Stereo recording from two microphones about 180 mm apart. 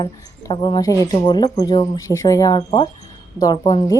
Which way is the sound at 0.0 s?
25° left (ahead or behind).